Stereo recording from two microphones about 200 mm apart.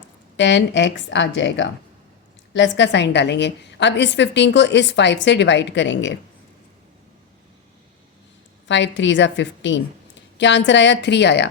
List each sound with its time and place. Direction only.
0.3 s a woman's voice: 65° left (ahead or behind)
8.6 s a woman's voice: 65° left (ahead or behind)